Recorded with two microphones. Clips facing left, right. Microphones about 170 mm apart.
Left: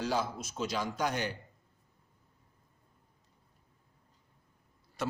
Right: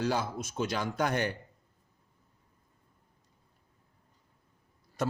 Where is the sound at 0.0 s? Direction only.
55° right (ahead or behind).